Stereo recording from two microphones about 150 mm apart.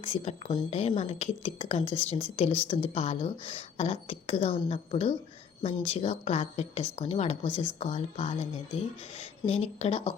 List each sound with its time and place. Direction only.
0.0 s a woman's voice: 40° left (ahead or behind)